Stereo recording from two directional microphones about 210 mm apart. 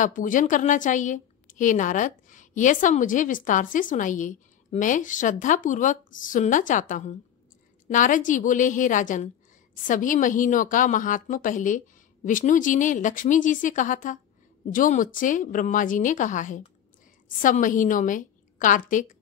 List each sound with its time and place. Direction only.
0.0 s a woman's voice: 40° left (ahead or behind)